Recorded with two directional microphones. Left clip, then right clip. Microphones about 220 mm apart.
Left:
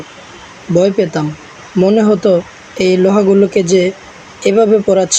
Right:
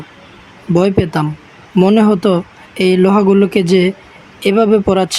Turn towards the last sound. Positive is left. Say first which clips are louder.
# left 2 dB
turn(degrees=-40)  # may be behind; listen again after turning